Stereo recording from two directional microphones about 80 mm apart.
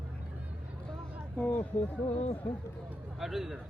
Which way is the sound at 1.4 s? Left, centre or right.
Centre.